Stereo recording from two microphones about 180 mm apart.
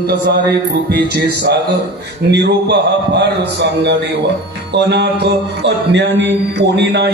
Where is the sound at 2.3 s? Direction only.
70° right (ahead or behind).